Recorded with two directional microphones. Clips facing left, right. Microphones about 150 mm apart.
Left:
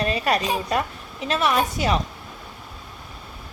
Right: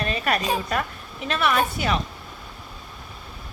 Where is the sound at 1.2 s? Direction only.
35° left (ahead or behind).